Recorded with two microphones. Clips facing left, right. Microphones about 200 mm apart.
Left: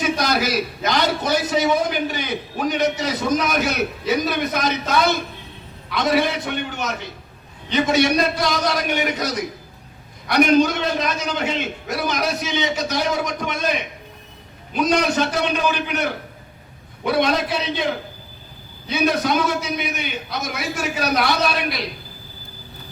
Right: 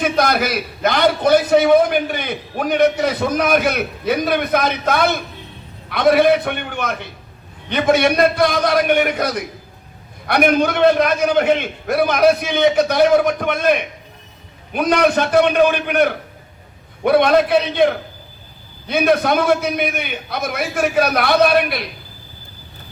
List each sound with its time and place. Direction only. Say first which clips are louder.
0.0 s a man's voice: right 3 dB; 55° right (ahead or behind)